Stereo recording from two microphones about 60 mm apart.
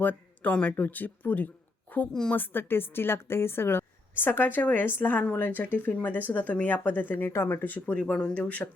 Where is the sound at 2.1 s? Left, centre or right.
Centre.